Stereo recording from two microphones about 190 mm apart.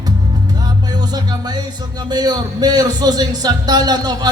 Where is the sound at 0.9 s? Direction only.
20° right (ahead or behind).